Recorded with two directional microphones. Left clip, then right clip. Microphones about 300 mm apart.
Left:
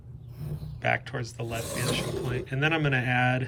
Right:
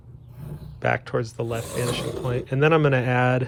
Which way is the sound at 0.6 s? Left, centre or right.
Centre.